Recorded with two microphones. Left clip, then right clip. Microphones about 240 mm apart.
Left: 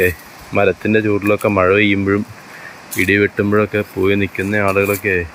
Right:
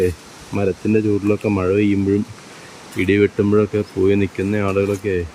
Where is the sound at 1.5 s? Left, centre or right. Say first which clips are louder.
Left 7 dB; left.